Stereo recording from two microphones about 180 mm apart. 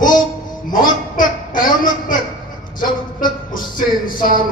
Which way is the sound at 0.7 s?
50° left (ahead or behind).